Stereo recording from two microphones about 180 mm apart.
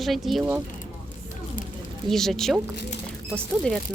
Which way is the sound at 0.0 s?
Centre (ahead or behind).